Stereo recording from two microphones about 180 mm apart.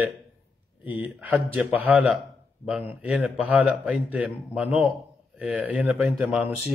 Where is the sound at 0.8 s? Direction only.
10° right (ahead or behind).